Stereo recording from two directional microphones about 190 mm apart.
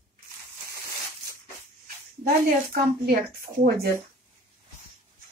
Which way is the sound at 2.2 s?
55° right (ahead or behind).